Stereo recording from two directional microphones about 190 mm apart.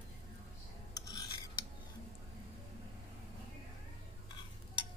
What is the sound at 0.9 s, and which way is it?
Filing, 20° left (ahead or behind).